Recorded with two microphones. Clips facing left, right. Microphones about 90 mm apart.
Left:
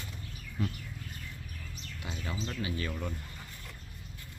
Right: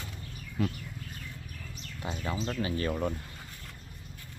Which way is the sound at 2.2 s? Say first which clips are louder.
Right 4 dB; 40° right (ahead or behind).